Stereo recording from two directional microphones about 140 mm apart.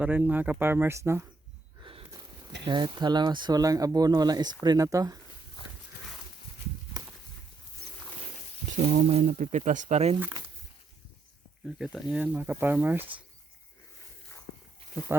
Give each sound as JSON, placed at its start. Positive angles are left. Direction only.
{"t": 0.0, "sound": "speech", "side_deg": -10}
{"t": 1.8, "sound": "a sound", "side_deg": -35}
{"t": 2.6, "sound": "speech", "side_deg": -30}
{"t": 5.6, "sound": "walk", "side_deg": 35}
{"t": 8.7, "sound": "speech", "side_deg": -60}
{"t": 11.8, "sound": "speech", "side_deg": -5}
{"t": 15.1, "sound": "speech", "side_deg": -15}